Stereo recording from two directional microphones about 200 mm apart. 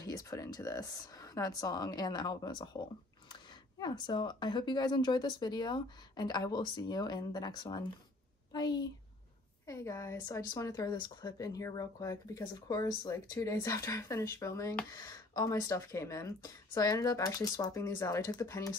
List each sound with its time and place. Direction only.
0.0 s speech: 15° left (ahead or behind)
3.8 s speech: 20° left (ahead or behind)
9.7 s speech: 15° left (ahead or behind)